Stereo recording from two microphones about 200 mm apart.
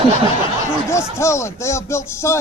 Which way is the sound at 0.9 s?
15° left (ahead or behind).